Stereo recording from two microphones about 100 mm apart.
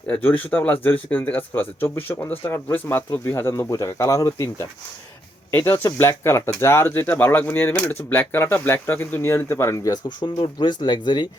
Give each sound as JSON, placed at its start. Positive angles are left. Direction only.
{"t": 0.1, "sound": "speech", "side_deg": 20}
{"t": 10.1, "sound": "speech", "side_deg": 50}